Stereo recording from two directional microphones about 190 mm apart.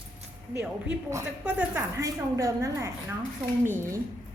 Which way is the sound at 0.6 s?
5° right (ahead or behind).